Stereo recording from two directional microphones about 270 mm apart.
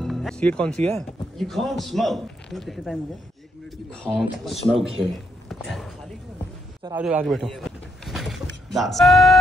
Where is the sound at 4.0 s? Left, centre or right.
Centre.